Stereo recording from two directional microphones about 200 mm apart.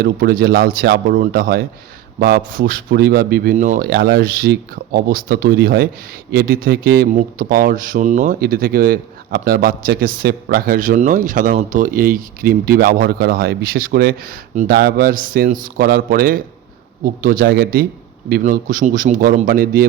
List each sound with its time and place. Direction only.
0.0 s speech: 50° right (ahead or behind)